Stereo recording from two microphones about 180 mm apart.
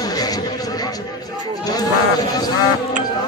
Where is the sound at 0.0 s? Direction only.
20° left (ahead or behind).